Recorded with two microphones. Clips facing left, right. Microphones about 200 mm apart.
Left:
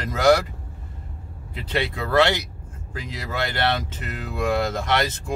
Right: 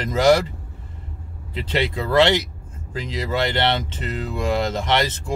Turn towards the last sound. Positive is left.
turn(degrees=-20)  # may be behind; listen again after turning